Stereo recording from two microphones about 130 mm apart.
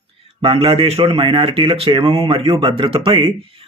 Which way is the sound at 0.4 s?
45° right (ahead or behind).